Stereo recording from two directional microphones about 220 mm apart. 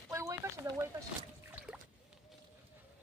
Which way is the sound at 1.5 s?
5° right (ahead or behind).